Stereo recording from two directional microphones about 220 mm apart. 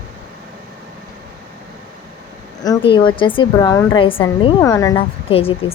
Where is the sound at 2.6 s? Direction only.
20° left (ahead or behind).